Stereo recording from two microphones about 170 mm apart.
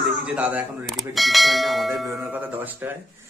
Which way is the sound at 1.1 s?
Centre (ahead or behind).